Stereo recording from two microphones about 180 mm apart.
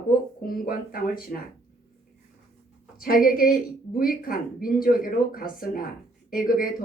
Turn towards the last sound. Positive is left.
turn(degrees=50)  # may be behind; listen again after turning